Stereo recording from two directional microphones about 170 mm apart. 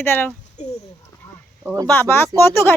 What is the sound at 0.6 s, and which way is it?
Speech, 45° left (ahead or behind).